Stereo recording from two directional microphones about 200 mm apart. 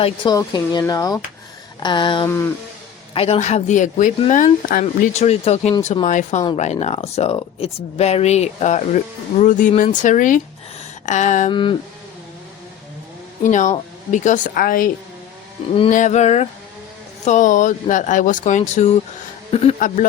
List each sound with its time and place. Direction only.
0.0 s speech: 20° left (ahead or behind)
3.2 s speech: 35° left (ahead or behind)
11.0 s a sound: 35° left (ahead or behind)
11.5 s speech: 25° left (ahead or behind)
13.4 s speech: 40° left (ahead or behind)
15.9 s speech: 40° left (ahead or behind)